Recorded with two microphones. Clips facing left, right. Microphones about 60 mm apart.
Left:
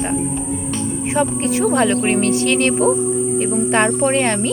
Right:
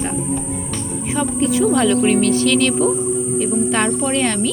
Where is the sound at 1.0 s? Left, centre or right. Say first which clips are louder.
Even; left.